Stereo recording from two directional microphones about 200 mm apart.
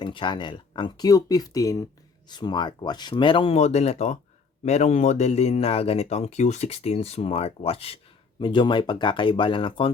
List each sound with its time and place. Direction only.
0.0 s a man's voice: 25° left (ahead or behind)